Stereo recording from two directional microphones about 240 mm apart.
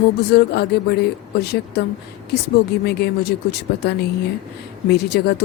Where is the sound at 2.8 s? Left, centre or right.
Left.